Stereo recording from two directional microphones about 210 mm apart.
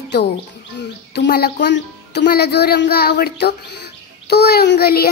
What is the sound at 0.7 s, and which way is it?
Speech, 50° left (ahead or behind).